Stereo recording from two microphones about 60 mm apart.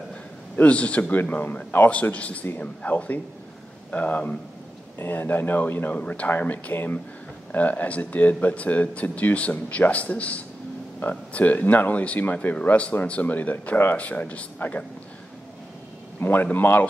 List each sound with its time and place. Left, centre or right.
0.6 s speech: left
4.9 s speech: left
16.2 s speech: left